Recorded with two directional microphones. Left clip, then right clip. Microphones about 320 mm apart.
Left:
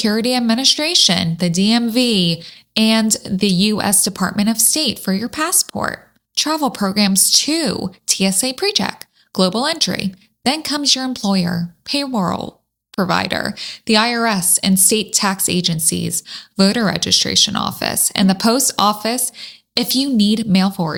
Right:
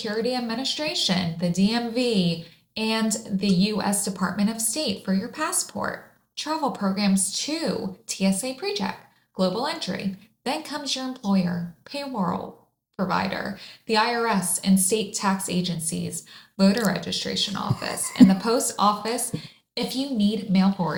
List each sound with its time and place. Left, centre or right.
0.0 s speech: left